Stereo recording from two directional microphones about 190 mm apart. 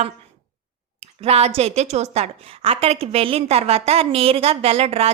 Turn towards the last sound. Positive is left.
turn(degrees=-30)  # may be behind; listen again after turning